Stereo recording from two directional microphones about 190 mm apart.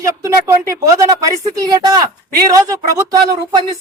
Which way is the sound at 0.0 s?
15° right (ahead or behind).